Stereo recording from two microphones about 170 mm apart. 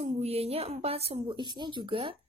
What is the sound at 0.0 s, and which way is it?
A woman's voice, 35° right (ahead or behind).